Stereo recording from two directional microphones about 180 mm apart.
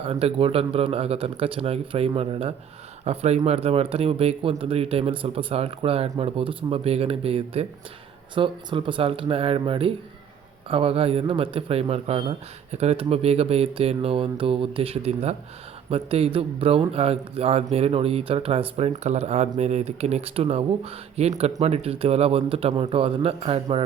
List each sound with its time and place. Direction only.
0.0 s speech: 35° right (ahead or behind)